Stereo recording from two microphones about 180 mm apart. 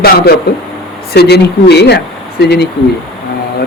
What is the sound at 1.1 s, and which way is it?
Speech, 65° left (ahead or behind).